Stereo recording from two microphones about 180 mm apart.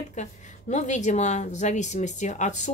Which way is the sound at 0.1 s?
40° left (ahead or behind).